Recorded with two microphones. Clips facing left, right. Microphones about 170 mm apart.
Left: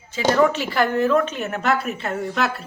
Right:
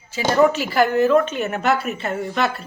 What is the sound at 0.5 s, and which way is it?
A woman's voice, 5° right (ahead or behind).